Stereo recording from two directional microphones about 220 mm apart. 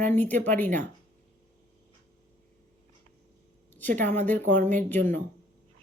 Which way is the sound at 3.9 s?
35° right (ahead or behind).